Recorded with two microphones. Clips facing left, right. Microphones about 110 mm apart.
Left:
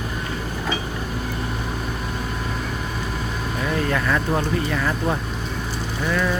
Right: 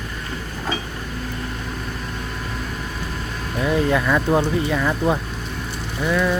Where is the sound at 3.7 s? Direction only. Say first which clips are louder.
Right 4 dB; 10° right (ahead or behind).